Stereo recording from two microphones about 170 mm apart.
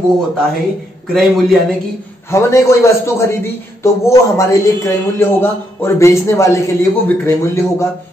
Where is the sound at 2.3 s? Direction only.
15° left (ahead or behind).